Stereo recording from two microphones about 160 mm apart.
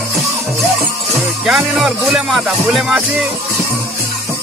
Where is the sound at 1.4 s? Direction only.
Centre (ahead or behind).